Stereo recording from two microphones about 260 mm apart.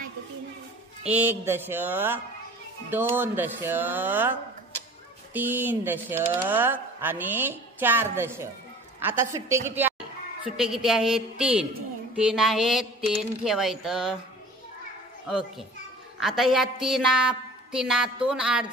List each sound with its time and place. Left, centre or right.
1.0 s a woman's voice: centre
15.2 s a woman's voice: centre